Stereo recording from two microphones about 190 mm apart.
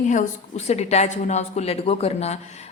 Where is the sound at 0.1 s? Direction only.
40° left (ahead or behind).